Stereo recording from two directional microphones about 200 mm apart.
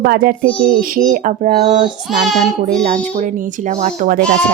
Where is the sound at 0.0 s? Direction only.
50° right (ahead or behind).